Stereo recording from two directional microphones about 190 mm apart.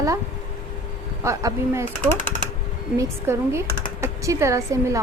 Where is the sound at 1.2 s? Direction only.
15° right (ahead or behind).